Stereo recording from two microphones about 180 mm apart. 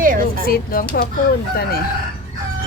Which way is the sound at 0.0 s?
50° right (ahead or behind).